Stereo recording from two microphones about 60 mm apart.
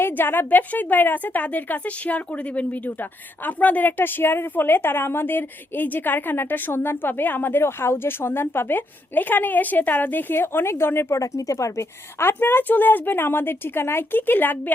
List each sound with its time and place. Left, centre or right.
0.0 s a woman's voice: left
11.1 s speech: left
12.2 s a woman's voice: left